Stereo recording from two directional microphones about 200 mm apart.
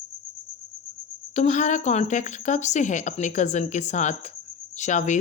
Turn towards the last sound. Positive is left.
turn(degrees=35)  # may be behind; listen again after turning